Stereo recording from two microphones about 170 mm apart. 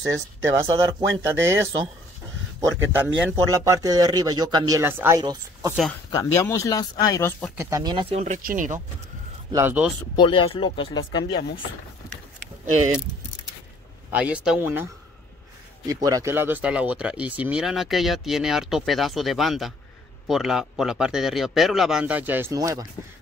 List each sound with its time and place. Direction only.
0.0 s speech: 20° right (ahead or behind)
3.0 s speech: 15° right (ahead or behind)
6.1 s speech: 15° left (ahead or behind)
7.5 s speech: 20° right (ahead or behind)
8.2 s speech: 50° right (ahead or behind)
9.5 s speech: 15° right (ahead or behind)
10.1 s speech: 30° left (ahead or behind)
14.1 s speech: 5° right (ahead or behind)
15.9 s speech: 20° right (ahead or behind)